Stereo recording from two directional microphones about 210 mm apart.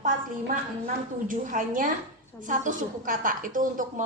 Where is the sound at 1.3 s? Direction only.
40° right (ahead or behind).